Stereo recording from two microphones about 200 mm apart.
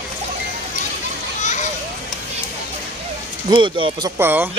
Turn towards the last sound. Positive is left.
turn(degrees=-10)  # may be behind; listen again after turning